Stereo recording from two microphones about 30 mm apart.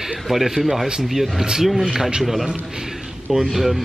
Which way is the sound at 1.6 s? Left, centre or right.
Centre.